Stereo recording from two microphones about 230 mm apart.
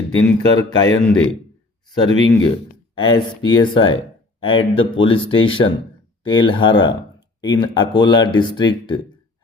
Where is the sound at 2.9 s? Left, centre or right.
Centre.